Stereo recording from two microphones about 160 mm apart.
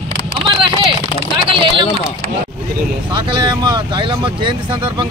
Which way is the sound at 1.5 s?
30° right (ahead or behind).